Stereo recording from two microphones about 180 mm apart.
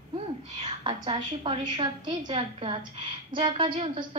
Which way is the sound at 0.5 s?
30° right (ahead or behind).